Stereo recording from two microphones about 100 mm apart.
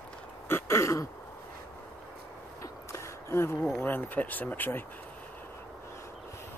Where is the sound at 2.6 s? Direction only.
30° left (ahead or behind).